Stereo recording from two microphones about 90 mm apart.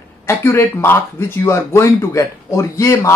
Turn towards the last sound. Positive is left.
turn(degrees=35)  # may be behind; listen again after turning